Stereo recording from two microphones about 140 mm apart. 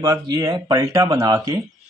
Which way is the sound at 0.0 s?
25° right (ahead or behind).